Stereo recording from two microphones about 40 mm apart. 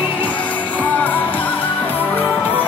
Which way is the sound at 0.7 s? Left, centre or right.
Left.